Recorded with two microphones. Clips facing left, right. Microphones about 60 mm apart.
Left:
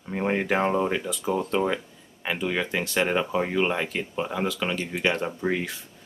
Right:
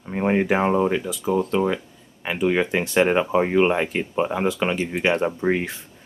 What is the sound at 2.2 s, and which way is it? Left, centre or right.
Speech, centre.